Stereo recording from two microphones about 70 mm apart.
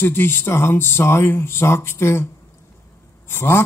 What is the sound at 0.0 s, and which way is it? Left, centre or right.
Speech, left.